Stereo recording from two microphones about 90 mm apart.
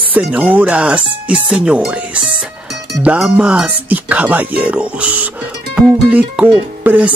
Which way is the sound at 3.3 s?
15° right (ahead or behind).